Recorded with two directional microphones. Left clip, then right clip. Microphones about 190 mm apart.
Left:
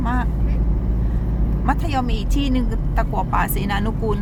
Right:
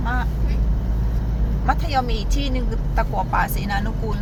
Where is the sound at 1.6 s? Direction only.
15° left (ahead or behind).